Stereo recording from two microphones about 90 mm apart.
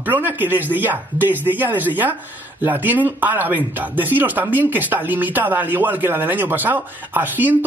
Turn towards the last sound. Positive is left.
turn(degrees=-20)  # may be behind; listen again after turning